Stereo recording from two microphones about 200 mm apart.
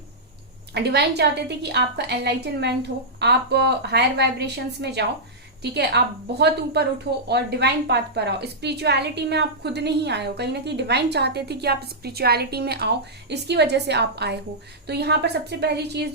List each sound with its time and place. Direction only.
0.7 s a woman's voice: 55° right (ahead or behind)
6.4 s a woman's voice: 55° right (ahead or behind)